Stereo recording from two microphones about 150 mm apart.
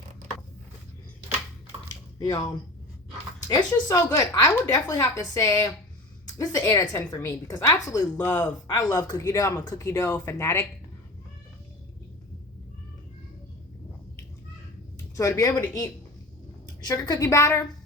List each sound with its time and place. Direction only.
2.1 s a woman's voice: 25° left (ahead or behind)
8.2 s speech: 10° left (ahead or behind)
8.6 s a woman's voice: 25° left (ahead or behind)
15.1 s a woman's voice: 20° left (ahead or behind)